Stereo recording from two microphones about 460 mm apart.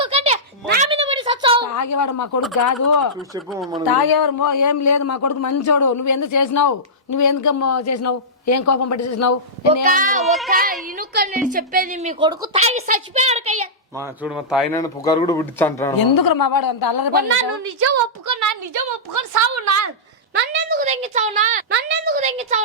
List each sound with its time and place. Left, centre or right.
0.0 s a sound: centre
1.7 s speech: left
3.3 s speech: centre
3.8 s speech: left
9.8 s a woman's voice: centre
10.2 s speech: centre
10.5 s a woman's voice: centre
16.0 s a woman's voice: left
17.8 s a woman's voice: right
20.3 s a woman's voice: centre